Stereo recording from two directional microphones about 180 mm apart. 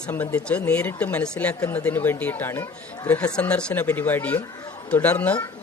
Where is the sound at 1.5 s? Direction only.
20° left (ahead or behind).